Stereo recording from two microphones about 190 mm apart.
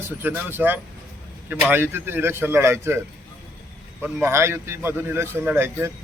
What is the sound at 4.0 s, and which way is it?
A man's voice, 10° right (ahead or behind).